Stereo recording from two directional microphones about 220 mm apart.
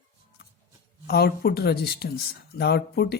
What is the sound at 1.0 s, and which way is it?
Speech, 45° left (ahead or behind).